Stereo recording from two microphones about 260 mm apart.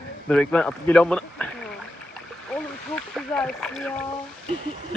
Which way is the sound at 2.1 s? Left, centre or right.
Centre.